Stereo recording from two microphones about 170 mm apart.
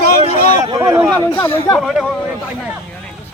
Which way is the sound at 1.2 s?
25° left (ahead or behind).